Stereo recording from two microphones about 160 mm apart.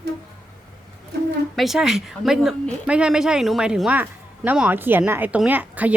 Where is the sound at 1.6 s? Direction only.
Centre (ahead or behind).